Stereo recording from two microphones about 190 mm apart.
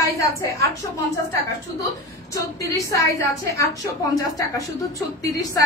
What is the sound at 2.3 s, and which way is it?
Speech, 15° left (ahead or behind).